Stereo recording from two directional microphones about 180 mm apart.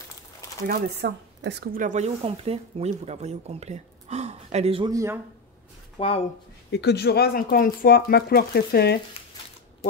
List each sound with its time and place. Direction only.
0.7 s speech: 65° right (ahead or behind); by 4.9 s 30° right (ahead or behind)
4.9 s speech: 15° right (ahead or behind)
5.9 s speech: 30° left (ahead or behind)
6.7 s speech: 70° left (ahead or behind)